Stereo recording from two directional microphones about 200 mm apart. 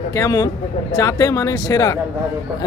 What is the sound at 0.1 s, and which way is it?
A man's voice, 15° left (ahead or behind).